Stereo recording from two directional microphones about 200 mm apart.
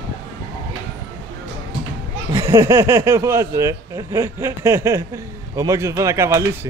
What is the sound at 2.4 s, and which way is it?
Speech, 15° right (ahead or behind).